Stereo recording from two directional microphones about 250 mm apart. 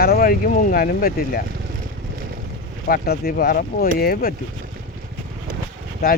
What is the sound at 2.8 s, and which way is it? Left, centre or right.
Speech, left.